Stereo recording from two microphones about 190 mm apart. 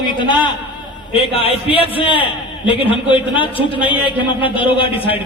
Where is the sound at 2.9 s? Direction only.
10° right (ahead or behind).